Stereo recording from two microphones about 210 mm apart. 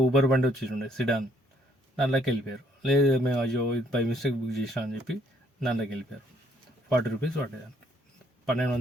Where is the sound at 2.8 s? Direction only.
Centre (ahead or behind).